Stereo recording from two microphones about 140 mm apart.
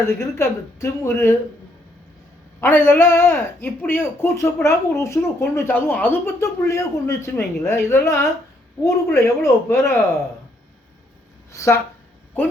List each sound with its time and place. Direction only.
0.2 s a woman's voice: 20° left (ahead or behind)
2.6 s a man's voice: 15° left (ahead or behind)
11.5 s a woman's voice: 20° left (ahead or behind)